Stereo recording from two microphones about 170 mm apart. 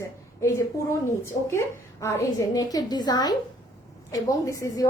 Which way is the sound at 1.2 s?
15° left (ahead or behind).